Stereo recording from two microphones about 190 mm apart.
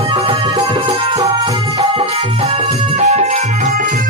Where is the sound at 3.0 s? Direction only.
35° right (ahead or behind).